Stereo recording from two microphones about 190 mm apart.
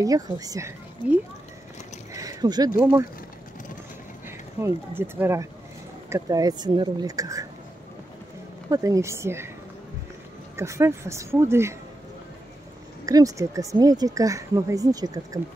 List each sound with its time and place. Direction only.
0.0 s a woman's voice: 20° right (ahead or behind)
2.1 s a sound: 20° right (ahead or behind)
2.8 s a woman's voice: 15° right (ahead or behind)
4.6 s a woman's voice: 10° right (ahead or behind)
8.6 s a woman's voice: 15° right (ahead or behind)
10.5 s a woman's voice: 15° right (ahead or behind)
13.0 s a woman's voice: 20° right (ahead or behind)